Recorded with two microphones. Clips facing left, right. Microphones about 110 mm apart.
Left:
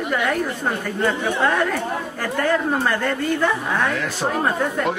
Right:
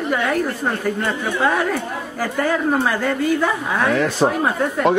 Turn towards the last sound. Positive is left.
turn(degrees=0)  # may be behind; listen again after turning